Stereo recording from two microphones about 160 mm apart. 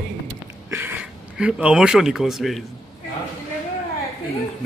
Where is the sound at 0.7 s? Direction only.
15° right (ahead or behind).